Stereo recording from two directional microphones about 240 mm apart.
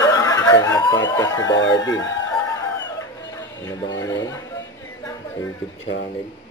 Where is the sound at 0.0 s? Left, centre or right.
Centre.